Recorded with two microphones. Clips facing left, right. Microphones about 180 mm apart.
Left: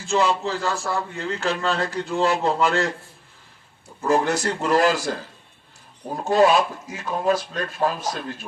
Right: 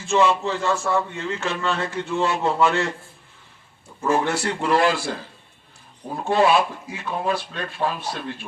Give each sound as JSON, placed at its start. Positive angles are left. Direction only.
{"t": 0.0, "sound": "a man's voice", "side_deg": 35}
{"t": 4.0, "sound": "a man's voice", "side_deg": 40}
{"t": 6.2, "sound": "a man's voice", "side_deg": 40}